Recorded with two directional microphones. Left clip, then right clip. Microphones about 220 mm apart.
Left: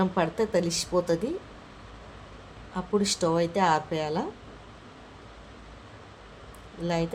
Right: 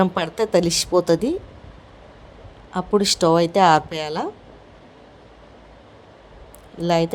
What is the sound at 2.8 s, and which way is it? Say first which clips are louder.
Speech: right 8 dB; 30° right (ahead or behind).